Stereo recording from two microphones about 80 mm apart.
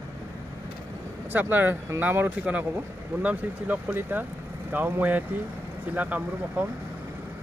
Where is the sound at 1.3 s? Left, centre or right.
Right.